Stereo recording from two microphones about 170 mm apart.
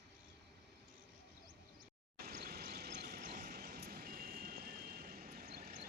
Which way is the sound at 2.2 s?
65° right (ahead or behind).